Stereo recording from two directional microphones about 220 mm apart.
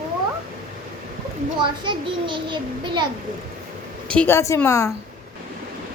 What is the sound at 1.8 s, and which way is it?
A child's voice, 20° right (ahead or behind).